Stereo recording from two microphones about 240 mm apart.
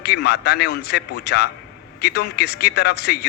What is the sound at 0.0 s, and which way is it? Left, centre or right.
A man's voice, left.